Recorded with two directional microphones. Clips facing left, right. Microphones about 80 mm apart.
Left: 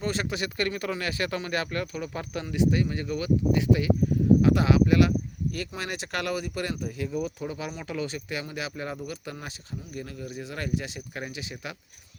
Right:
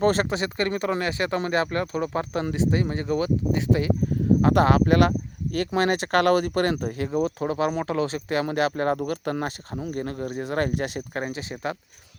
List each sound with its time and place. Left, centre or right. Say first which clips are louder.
0.0 s speech: right 8 dB; right
4.4 s speech: right 6 dB; right
7.9 s speech: right 7 dB; right
8.4 s speech: right 11 dB; right
9.9 s speech: right 7 dB; right